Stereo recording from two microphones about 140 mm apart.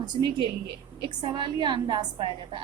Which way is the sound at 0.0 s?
30° right (ahead or behind).